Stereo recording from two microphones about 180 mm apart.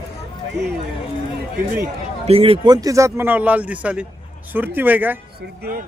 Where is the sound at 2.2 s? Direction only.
30° right (ahead or behind); by 5.2 s 10° right (ahead or behind).